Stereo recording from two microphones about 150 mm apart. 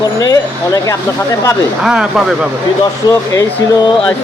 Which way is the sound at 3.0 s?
25° left (ahead or behind).